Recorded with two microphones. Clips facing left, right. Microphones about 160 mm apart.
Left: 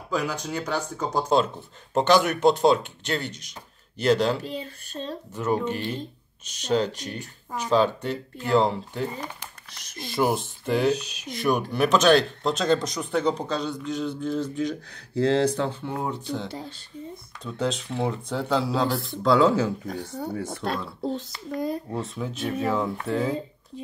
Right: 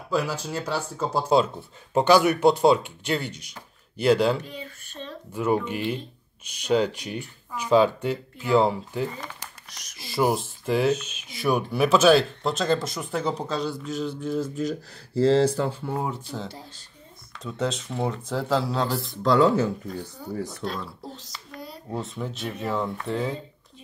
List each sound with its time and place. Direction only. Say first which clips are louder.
0.1 s speech: right 1 dB; 5° right (ahead or behind)
10.9 s speech: even; 35° left (ahead or behind)
11.2 s speech: even; 5° right (ahead or behind)
19.9 s speech: left 3 dB; 85° left
20.4 s speech: left 3 dB; 65° left (ahead or behind)
21.9 s speech: left 1 dB; centre (ahead or behind)